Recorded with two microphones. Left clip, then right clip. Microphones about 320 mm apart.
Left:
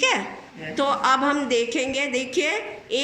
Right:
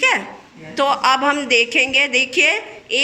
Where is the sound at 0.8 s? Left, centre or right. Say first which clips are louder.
Right 5 dB; centre.